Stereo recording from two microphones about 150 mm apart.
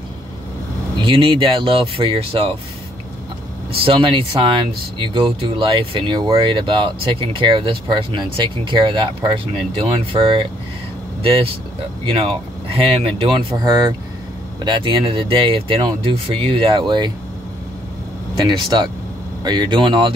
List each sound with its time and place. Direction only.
1.0 s speech: 35° right (ahead or behind)
3.7 s speech: 35° right (ahead or behind)
18.4 s speech: 30° right (ahead or behind)